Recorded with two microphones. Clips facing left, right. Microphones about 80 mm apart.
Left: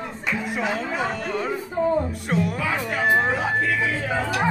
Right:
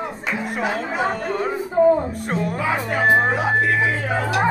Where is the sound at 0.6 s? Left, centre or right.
Right.